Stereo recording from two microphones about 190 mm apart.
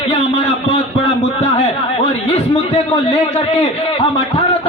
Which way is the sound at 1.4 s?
30° left (ahead or behind).